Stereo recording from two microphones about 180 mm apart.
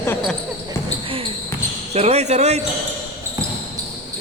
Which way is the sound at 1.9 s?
35° right (ahead or behind).